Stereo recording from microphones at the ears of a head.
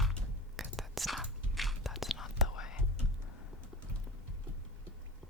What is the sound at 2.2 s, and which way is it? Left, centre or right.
Whispering, left.